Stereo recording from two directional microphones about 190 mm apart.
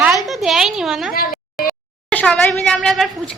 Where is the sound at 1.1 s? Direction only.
50° left (ahead or behind).